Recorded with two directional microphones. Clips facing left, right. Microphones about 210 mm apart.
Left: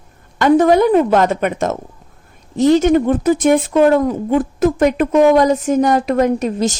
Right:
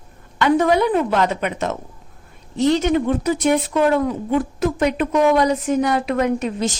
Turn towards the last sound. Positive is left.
turn(degrees=40)  # may be behind; listen again after turning